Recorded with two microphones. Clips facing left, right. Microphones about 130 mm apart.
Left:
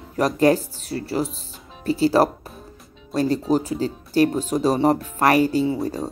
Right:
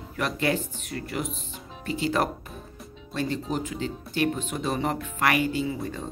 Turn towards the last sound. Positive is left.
turn(degrees=35)  # may be behind; listen again after turning